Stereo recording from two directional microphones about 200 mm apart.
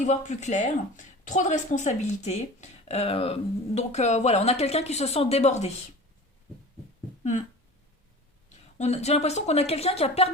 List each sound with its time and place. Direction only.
0.0 s a woman's voice: 40° left (ahead or behind)
7.2 s a sound: 35° left (ahead or behind)
8.8 s a woman's voice: 30° left (ahead or behind)